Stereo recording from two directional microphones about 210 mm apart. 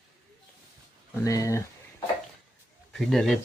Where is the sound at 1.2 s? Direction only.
15° left (ahead or behind).